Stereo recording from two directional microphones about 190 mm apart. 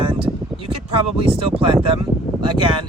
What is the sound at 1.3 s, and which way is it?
Speech, 30° right (ahead or behind).